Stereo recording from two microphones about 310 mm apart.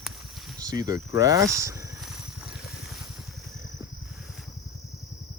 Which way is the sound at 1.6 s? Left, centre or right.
Centre.